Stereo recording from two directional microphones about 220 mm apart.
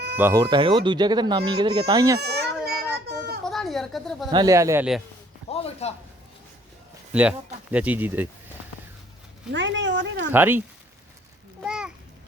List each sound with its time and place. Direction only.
0.2 s speech: 15° right (ahead or behind)
2.1 s baby cry: 45° right (ahead or behind)
3.4 s a sound: centre (ahead or behind)
4.3 s speech: 15° right (ahead or behind)
5.5 s a sound: 30° left (ahead or behind)
7.1 s speech: 5° right (ahead or behind)
9.5 s speech: 55° right (ahead or behind)
10.3 s speech: 10° right (ahead or behind)
11.6 s a sound: 5° right (ahead or behind)